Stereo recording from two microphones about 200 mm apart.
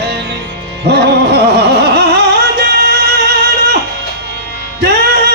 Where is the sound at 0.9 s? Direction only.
55° right (ahead or behind).